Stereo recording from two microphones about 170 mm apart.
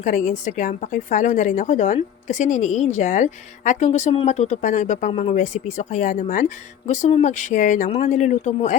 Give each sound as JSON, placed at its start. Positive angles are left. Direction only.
{"t": 0.0, "sound": "a woman's voice", "side_deg": 45}